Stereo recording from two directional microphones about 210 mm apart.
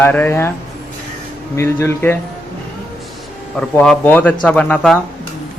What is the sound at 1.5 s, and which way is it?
Speech, 10° left (ahead or behind).